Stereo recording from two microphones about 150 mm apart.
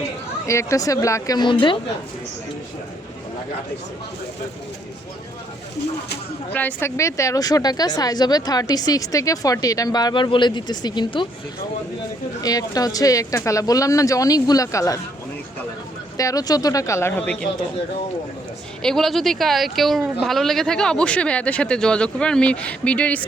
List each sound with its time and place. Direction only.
0.4 s a woman's voice: 20° left (ahead or behind)
6.5 s a woman's voice: 10° left (ahead or behind); by 11.3 s 30° left (ahead or behind)
12.4 s a woman's voice: 25° left (ahead or behind)
16.1 s a woman's voice: 25° left (ahead or behind)
18.8 s speech: 5° left (ahead or behind)